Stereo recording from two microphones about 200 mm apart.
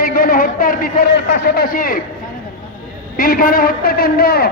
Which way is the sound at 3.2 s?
45° left (ahead or behind).